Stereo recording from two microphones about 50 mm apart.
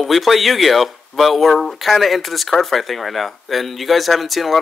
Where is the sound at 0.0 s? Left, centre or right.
Centre.